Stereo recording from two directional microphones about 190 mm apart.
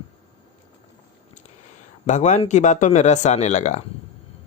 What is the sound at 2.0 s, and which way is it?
Speech, 40° left (ahead or behind).